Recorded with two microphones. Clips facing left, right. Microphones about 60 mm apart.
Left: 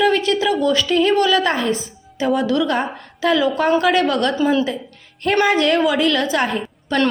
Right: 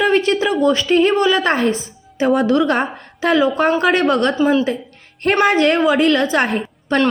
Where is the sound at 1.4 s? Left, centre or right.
Right.